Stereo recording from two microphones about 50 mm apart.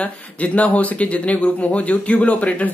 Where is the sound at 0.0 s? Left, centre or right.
Left.